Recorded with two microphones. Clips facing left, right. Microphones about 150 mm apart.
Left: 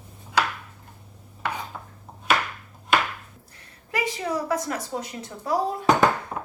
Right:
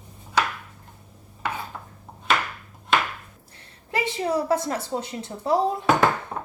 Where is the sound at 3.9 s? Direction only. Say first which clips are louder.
Right 3 dB; 30° right (ahead or behind).